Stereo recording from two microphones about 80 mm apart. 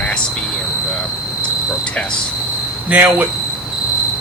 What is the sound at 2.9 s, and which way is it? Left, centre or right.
Speech, right.